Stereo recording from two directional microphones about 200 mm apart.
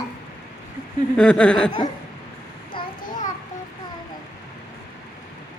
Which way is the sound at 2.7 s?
25° left (ahead or behind).